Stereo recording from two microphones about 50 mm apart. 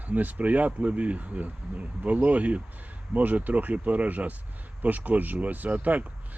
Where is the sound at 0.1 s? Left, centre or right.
Right.